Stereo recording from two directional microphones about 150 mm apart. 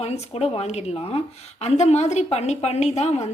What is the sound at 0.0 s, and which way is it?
A woman's voice, 45° left (ahead or behind).